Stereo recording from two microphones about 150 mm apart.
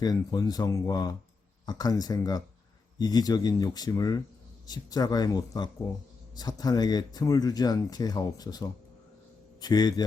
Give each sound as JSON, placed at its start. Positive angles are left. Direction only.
{"t": 0.0, "sound": "speech", "side_deg": 25}